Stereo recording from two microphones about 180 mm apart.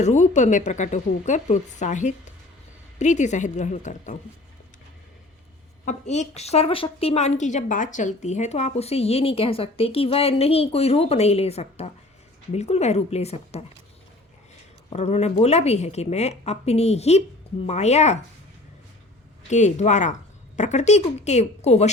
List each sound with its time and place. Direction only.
0.0 s a woman's voice: 40° left (ahead or behind)
5.8 s a woman's voice: 40° left (ahead or behind)
14.8 s a woman's voice: 35° left (ahead or behind)
19.5 s a woman's voice: 40° left (ahead or behind)